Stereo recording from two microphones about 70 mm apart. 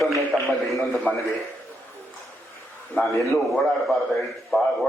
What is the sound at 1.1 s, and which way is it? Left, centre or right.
Speech, left.